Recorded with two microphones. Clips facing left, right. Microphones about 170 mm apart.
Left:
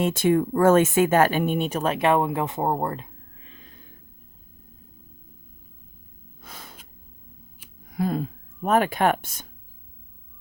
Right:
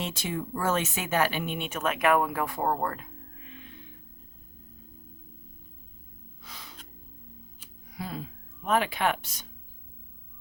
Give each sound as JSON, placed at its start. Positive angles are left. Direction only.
{"t": 0.0, "sound": "speech", "side_deg": 55}
{"t": 6.4, "sound": "gasp", "side_deg": 50}
{"t": 7.9, "sound": "speech", "side_deg": 50}